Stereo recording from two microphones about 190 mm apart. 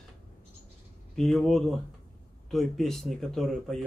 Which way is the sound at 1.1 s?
Centre (ahead or behind).